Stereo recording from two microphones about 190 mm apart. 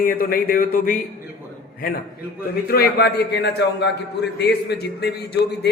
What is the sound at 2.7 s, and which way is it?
A man's voice, 55° left (ahead or behind).